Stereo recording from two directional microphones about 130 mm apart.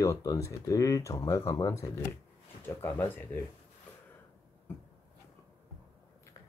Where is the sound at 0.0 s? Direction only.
25° left (ahead or behind).